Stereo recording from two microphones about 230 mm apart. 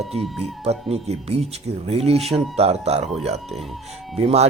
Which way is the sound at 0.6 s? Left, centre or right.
Right.